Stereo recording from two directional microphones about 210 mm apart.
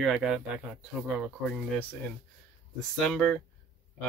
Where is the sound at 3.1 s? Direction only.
5° left (ahead or behind).